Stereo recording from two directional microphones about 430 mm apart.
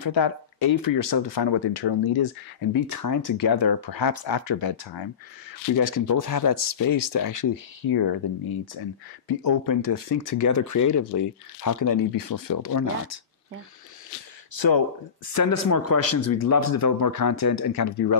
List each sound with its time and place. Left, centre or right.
0.0 s speech: left
2.7 s speech: left
5.8 s speech: left
9.4 s speech: left
14.5 s speech: left
15.3 s speech: left